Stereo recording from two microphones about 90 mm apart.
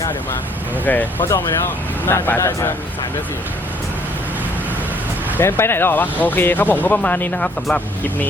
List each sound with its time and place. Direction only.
0.9 s speech: 20° left (ahead or behind)
1.3 s speech: 30° left (ahead or behind)
5.4 s speech: 25° left (ahead or behind)